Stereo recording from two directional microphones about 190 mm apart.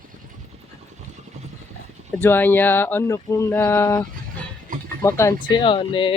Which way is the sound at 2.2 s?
10° left (ahead or behind).